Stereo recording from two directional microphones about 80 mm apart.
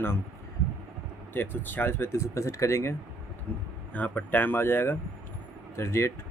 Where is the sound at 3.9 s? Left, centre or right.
Centre.